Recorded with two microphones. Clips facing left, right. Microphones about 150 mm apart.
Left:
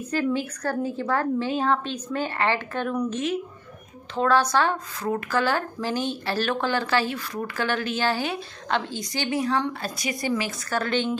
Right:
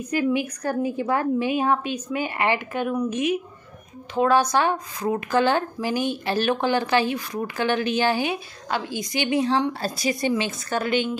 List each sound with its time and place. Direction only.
0.1 s a woman's voice: 15° right (ahead or behind)